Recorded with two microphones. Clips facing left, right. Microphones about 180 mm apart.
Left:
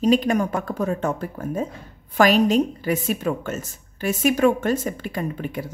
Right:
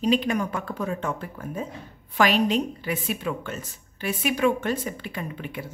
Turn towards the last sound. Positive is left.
turn(degrees=45)  # may be behind; listen again after turning